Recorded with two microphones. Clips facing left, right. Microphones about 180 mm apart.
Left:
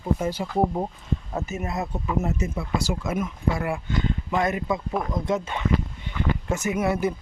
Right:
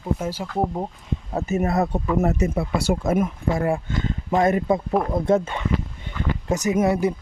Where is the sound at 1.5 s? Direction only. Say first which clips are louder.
Right 12 dB; 60° right (ahead or behind).